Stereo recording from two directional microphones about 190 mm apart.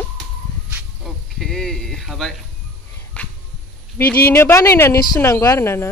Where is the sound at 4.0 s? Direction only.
10° left (ahead or behind).